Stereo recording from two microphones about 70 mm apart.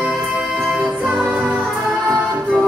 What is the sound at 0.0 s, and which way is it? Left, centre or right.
Music, centre.